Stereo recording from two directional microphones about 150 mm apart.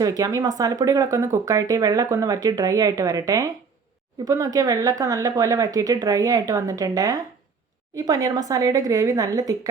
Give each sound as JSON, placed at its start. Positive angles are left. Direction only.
{"t": 0.0, "sound": "speech", "side_deg": -25}